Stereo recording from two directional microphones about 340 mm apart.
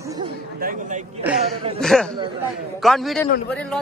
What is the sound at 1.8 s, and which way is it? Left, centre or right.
A man's voice, centre.